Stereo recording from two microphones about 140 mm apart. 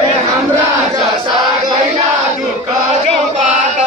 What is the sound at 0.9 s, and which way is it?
Chant, 30° right (ahead or behind).